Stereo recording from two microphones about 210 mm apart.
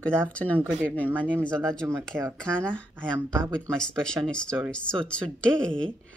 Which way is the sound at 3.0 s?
10° right (ahead or behind).